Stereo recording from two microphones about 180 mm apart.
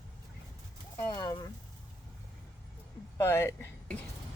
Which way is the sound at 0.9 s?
25° left (ahead or behind).